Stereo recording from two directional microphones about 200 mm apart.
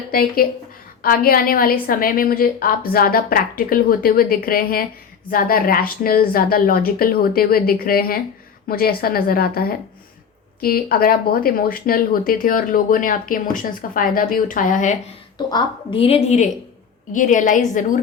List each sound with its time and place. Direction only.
0.1 s speech: 45° left (ahead or behind)
15.4 s a woman's voice: 25° left (ahead or behind); by 18.0 s 40° left (ahead or behind)